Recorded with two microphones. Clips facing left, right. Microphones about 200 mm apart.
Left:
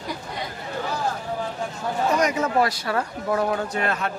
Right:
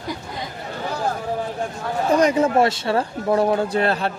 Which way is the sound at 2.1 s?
30° right (ahead or behind).